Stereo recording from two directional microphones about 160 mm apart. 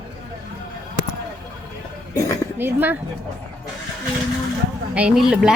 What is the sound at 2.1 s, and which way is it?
Speech, 20° left (ahead or behind).